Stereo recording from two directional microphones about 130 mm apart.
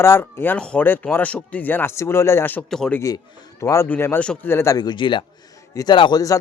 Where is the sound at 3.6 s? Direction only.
25° left (ahead or behind).